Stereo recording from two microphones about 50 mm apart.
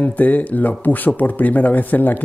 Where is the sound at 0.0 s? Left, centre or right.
Left.